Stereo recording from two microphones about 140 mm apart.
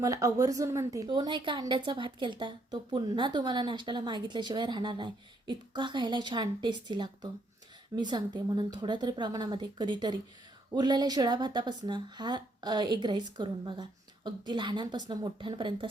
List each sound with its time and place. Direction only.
0.0 s a woman's voice: 25° right (ahead or behind)